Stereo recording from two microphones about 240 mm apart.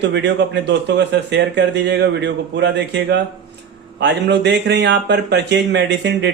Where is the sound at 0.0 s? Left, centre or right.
Right.